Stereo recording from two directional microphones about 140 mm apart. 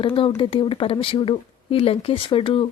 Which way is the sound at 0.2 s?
40° left (ahead or behind).